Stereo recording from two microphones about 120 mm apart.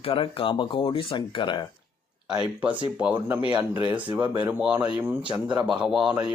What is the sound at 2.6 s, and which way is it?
A man's voice, 10° right (ahead or behind).